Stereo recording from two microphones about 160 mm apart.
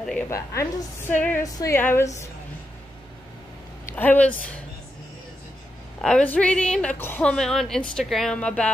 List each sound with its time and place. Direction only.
0.3 s a woman's voice: 20° left (ahead or behind)
3.9 s a woman's voice: 10° left (ahead or behind)
5.9 s a woman's voice: 5° left (ahead or behind)